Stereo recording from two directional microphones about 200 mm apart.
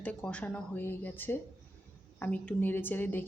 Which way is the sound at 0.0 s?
5° left (ahead or behind).